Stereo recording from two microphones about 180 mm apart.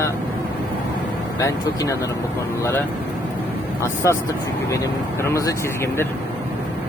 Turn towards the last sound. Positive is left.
turn(degrees=15)  # may be behind; listen again after turning